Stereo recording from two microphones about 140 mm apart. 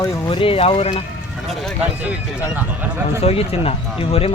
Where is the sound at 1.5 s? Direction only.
Centre (ahead or behind).